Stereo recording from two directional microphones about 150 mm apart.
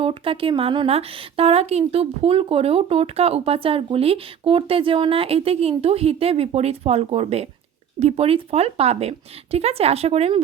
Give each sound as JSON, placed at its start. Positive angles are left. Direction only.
{"t": 0.0, "sound": "speech", "side_deg": -35}